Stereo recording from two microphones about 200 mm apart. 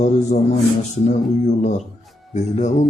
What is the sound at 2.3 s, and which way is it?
Speech, 35° left (ahead or behind).